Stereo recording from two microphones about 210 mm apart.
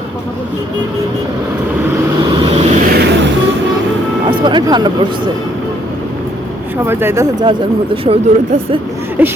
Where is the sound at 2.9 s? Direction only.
55° right (ahead or behind).